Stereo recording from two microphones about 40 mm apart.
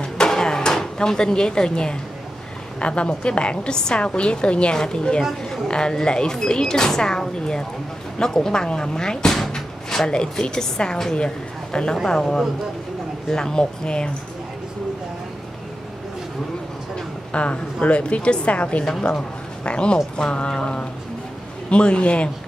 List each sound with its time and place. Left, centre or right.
0.3 s drawer open or close: centre
2.8 s a woman's voice: left
9.5 s door: centre
10.4 s a woman's voice: left
17.3 s a woman's voice: left